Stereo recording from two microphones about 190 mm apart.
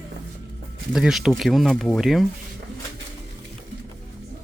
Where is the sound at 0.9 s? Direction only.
Centre (ahead or behind).